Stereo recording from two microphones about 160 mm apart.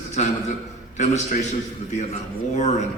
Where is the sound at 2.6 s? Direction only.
45° left (ahead or behind).